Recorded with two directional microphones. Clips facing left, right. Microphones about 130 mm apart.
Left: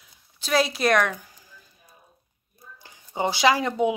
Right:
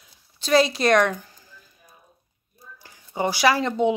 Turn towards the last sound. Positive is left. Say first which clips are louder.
# right 1 dB
turn(degrees=10)  # may be behind; listen again after turning